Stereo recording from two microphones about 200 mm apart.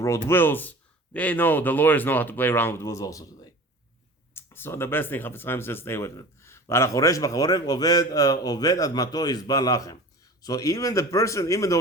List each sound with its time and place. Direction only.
0.3 s speech: 10° left (ahead or behind)
4.4 s speech: 10° left (ahead or behind)